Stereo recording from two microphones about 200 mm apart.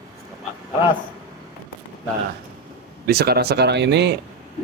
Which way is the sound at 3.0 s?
50° right (ahead or behind).